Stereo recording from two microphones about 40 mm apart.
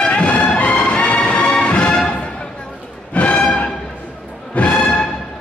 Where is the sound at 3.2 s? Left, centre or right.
Left.